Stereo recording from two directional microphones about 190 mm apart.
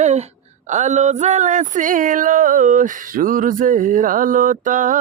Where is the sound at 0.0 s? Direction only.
35° right (ahead or behind).